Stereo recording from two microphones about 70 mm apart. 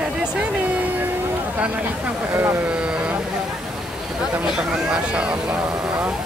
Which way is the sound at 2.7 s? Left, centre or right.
Centre.